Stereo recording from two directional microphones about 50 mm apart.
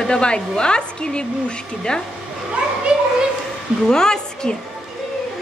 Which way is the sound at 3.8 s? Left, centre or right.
Centre.